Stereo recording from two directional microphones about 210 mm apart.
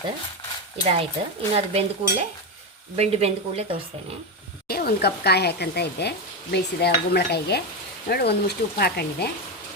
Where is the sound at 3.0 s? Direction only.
30° right (ahead or behind).